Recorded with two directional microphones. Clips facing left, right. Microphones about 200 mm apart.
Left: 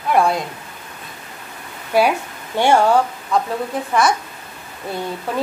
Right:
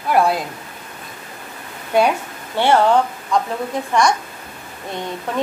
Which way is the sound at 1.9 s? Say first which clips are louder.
Even; 10° left (ahead or behind).